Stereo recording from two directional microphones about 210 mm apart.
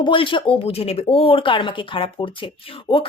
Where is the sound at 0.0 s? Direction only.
25° left (ahead or behind).